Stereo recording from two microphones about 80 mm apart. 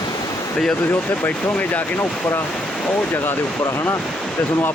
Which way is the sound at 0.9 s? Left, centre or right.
Centre.